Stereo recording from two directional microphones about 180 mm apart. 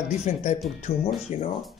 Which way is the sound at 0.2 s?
40° left (ahead or behind).